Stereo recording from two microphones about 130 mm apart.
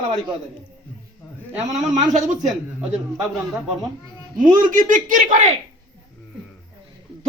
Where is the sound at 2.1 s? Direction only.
70° right (ahead or behind).